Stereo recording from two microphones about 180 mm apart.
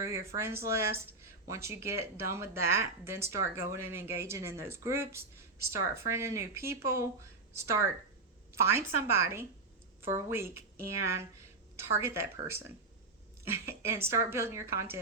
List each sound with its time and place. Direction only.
0.0 s a woman's voice: 15° right (ahead or behind)